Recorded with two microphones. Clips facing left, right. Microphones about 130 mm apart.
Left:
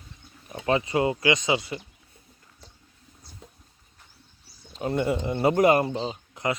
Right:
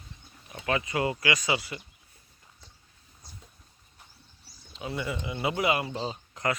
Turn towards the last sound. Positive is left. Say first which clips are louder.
# left 2 dB
turn(degrees=20)  # may be behind; listen again after turning